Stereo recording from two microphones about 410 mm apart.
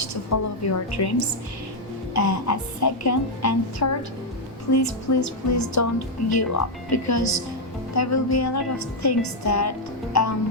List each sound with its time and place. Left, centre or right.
0.0 s a woman's voice: left
0.9 s a woman's voice: left
2.1 s a woman's voice: left